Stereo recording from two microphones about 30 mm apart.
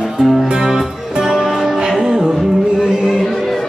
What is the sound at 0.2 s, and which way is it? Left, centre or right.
Music, right.